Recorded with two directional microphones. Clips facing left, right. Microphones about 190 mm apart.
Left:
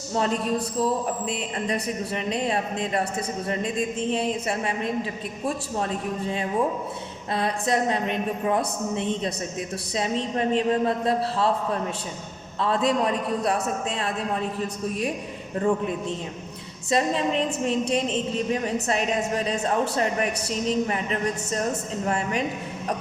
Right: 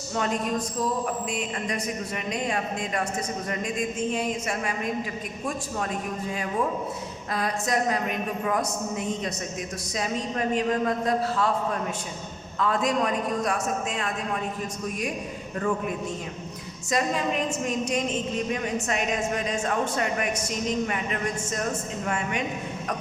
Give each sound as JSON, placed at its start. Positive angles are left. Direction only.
{"t": 0.1, "sound": "a woman's voice", "side_deg": 35}
{"t": 16.9, "sound": "speech", "side_deg": 30}